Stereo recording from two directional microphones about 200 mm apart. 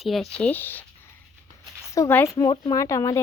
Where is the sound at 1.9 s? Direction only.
15° left (ahead or behind).